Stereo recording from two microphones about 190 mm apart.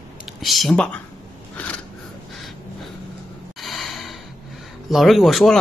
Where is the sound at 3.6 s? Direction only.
Centre (ahead or behind).